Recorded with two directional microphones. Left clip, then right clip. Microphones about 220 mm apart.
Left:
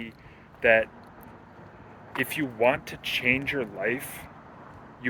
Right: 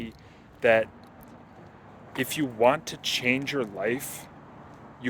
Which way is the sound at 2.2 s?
30° right (ahead or behind).